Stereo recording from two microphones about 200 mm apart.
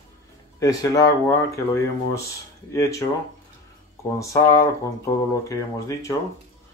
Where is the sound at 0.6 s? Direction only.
15° left (ahead or behind).